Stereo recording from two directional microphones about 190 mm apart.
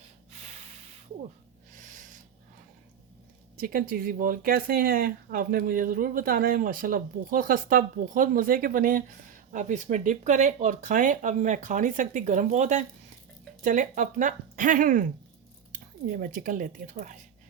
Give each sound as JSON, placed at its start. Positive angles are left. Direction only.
{"t": 0.3, "sound": "snort", "side_deg": -35}
{"t": 3.6, "sound": "speech", "side_deg": -50}